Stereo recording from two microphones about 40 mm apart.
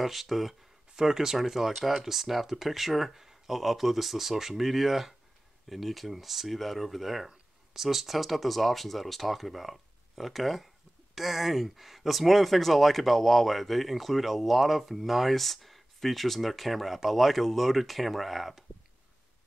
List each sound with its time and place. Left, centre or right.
0.0 s speech: centre